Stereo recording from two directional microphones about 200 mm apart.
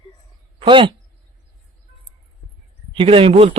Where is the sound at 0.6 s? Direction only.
25° right (ahead or behind).